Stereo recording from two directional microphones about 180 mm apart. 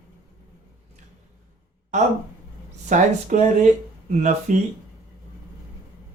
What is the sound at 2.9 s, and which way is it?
Speech, 40° right (ahead or behind).